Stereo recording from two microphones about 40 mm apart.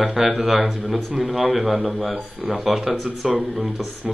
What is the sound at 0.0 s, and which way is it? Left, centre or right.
Speech, centre.